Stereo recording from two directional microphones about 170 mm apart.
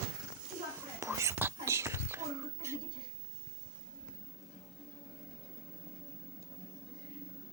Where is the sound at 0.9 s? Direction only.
15° right (ahead or behind).